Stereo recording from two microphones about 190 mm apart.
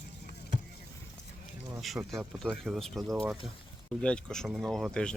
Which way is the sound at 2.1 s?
5° left (ahead or behind).